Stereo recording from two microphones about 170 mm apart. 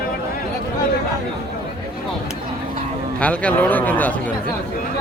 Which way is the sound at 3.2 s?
10° left (ahead or behind).